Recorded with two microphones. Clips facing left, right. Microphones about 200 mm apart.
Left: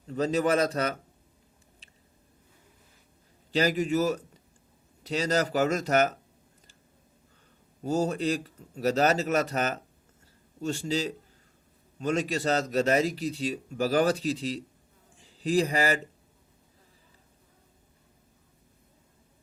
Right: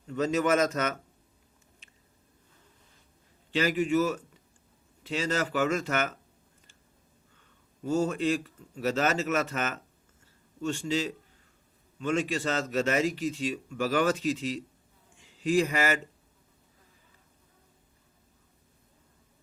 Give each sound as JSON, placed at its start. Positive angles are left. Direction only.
{"t": 0.1, "sound": "a man's voice", "side_deg": 35}
{"t": 1.8, "sound": "biting", "side_deg": 35}
{"t": 3.5, "sound": "a man's voice", "side_deg": 40}
{"t": 7.9, "sound": "a man's voice", "side_deg": 40}